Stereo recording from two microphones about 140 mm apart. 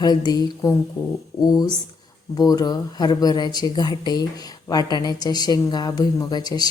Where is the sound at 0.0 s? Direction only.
30° left (ahead or behind).